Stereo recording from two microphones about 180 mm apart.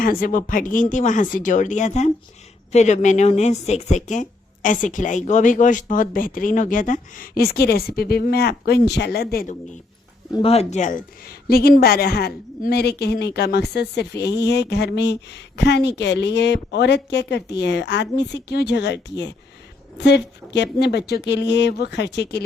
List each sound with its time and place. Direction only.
0.0 s speech: 50° left (ahead or behind)
10.3 s speech: 35° left (ahead or behind)
11.4 s speech: 55° left (ahead or behind)